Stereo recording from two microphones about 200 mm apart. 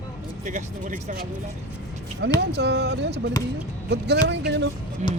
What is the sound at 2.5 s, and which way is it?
Speech, 55° right (ahead or behind).